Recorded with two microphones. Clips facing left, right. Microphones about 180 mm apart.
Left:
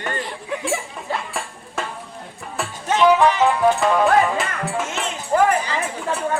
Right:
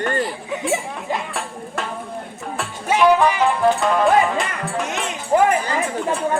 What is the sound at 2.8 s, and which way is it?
Music, 10° right (ahead or behind).